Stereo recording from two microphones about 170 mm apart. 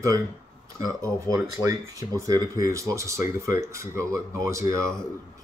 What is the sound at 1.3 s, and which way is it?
Speech, 20° right (ahead or behind).